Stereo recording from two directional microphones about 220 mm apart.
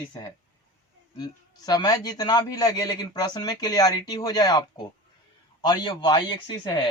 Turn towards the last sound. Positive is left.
turn(degrees=20)  # may be behind; listen again after turning